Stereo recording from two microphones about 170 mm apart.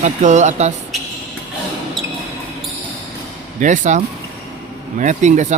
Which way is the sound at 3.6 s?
45° right (ahead or behind).